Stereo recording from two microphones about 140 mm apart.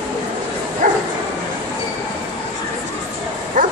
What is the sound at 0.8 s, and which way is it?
Bow-wow, 75° right (ahead or behind).